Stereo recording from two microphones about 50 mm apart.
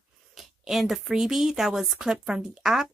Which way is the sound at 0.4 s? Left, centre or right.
Centre.